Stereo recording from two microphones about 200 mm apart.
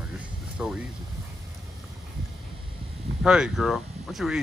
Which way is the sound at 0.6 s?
5° right (ahead or behind).